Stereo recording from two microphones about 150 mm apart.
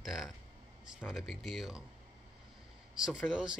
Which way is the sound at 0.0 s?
5° right (ahead or behind).